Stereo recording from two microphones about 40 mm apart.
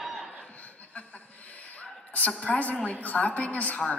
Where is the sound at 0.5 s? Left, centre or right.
Left.